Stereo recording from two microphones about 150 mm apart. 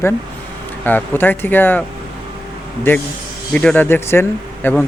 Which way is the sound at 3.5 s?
10° left (ahead or behind).